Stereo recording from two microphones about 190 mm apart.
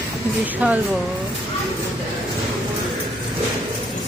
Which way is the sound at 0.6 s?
10° right (ahead or behind).